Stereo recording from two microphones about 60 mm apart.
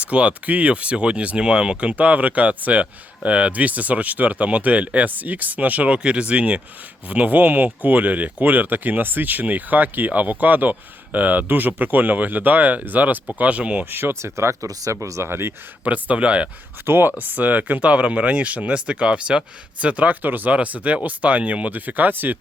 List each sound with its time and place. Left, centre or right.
0.0 s speech: right
13.9 s speech: right
15.3 s speech: right
15.8 s speech: right
16.8 s speech: right